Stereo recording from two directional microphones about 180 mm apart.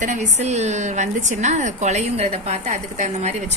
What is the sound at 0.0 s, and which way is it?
A woman's voice, 40° right (ahead or behind).